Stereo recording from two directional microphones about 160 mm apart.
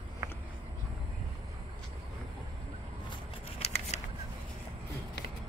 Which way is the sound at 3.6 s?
40° left (ahead or behind).